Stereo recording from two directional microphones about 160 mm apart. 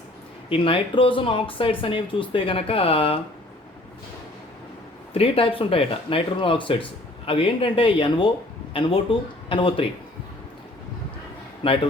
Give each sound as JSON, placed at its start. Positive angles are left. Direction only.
{"t": 0.5, "sound": "speech", "side_deg": 35}
{"t": 5.1, "sound": "speech", "side_deg": 35}
{"t": 11.6, "sound": "speech", "side_deg": 30}